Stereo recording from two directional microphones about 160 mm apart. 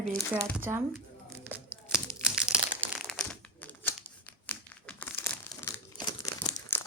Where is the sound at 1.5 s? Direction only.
5° right (ahead or behind).